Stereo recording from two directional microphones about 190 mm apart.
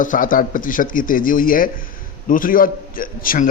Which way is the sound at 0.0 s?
45° left (ahead or behind).